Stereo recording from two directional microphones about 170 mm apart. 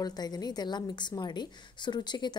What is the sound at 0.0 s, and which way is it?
A woman's voice, 25° left (ahead or behind).